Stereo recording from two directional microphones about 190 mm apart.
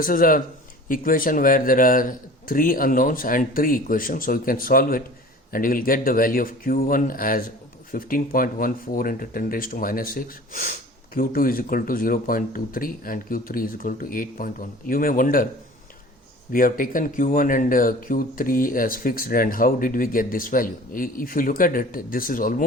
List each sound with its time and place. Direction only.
0.0 s speech: 45° left (ahead or behind)
16.5 s speech: 45° left (ahead or behind)